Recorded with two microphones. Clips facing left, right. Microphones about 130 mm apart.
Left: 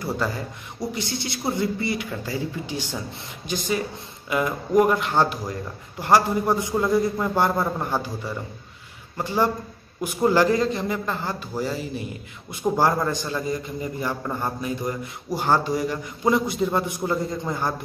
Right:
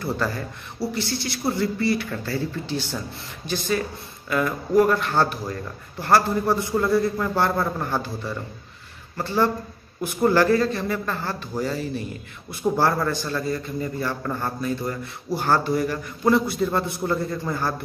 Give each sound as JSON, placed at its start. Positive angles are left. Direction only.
{"t": 0.0, "sound": "a man's voice", "side_deg": 15}